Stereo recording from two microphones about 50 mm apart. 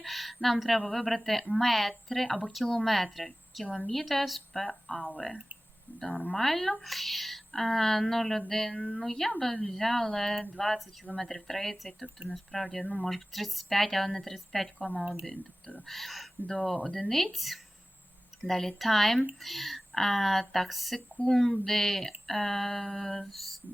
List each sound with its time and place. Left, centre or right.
0.0 s a sound: centre
0.9 s a woman's voice: centre
15.9 s a woman's voice: centre
16.7 s speech: left
17.0 s a woman's voice: centre